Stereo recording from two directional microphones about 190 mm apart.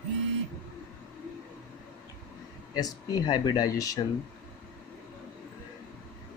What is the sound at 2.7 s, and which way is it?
Speech, 20° left (ahead or behind).